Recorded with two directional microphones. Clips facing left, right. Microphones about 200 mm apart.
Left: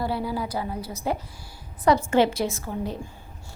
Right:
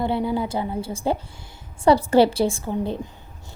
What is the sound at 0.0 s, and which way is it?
A woman's voice, 25° right (ahead or behind).